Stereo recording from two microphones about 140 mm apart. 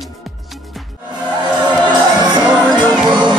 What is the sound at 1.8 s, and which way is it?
Music, 30° right (ahead or behind).